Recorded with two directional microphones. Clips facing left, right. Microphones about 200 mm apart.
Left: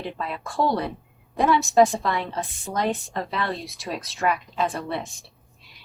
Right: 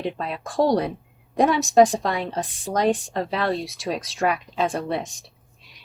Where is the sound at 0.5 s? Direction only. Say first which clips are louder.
Right 4 dB; 35° right (ahead or behind).